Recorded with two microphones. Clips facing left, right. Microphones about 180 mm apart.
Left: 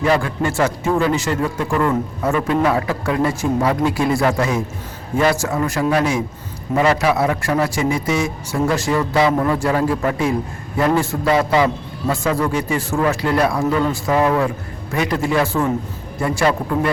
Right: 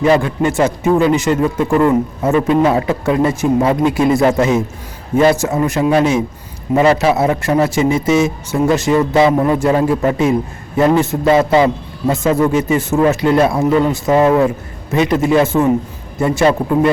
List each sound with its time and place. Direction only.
0.0 s a man's voice: 20° right (ahead or behind)